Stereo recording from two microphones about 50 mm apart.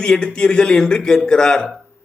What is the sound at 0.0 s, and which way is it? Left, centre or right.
A man's voice, centre.